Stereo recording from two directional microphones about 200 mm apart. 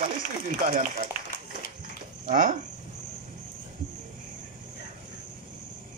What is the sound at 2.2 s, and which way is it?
Speech, 40° right (ahead or behind).